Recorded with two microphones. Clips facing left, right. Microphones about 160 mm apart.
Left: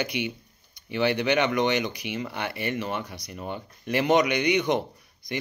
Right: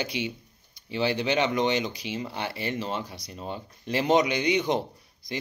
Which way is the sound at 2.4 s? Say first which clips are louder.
Left 2 dB; 60° left (ahead or behind).